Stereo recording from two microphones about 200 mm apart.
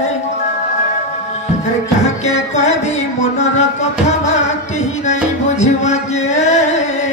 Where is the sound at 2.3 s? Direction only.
35° left (ahead or behind).